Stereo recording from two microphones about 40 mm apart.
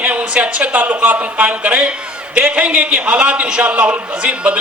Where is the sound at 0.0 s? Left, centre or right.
Right.